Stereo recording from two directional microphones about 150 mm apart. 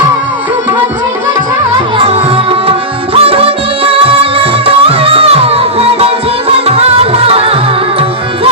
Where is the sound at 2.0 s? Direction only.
40° right (ahead or behind).